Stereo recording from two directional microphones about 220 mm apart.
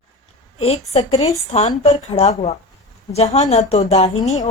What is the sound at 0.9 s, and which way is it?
Speech, 30° left (ahead or behind).